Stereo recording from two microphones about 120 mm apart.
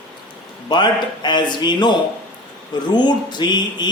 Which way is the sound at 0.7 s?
40° left (ahead or behind).